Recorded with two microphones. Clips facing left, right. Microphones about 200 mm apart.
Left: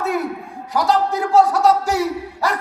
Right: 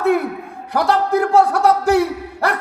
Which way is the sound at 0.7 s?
60° right (ahead or behind).